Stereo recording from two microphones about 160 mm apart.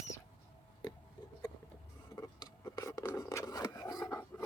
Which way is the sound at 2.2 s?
20° left (ahead or behind).